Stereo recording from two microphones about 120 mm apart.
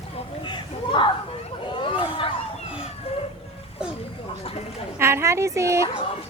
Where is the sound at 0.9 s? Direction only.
45° left (ahead or behind).